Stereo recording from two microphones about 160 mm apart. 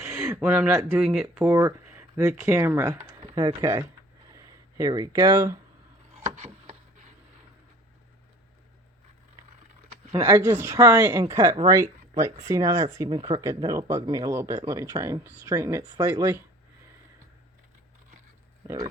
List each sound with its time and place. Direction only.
0.0 s speech: 15° right (ahead or behind)
1.5 s speech: 20° right (ahead or behind)
3.2 s speech: 25° right (ahead or behind)
6.2 s a sound: 50° right (ahead or behind)
10.1 s speech: 20° right (ahead or behind)